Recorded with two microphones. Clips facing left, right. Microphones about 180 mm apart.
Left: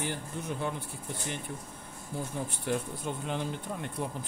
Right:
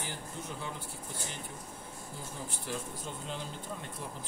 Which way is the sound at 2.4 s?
60° left (ahead or behind).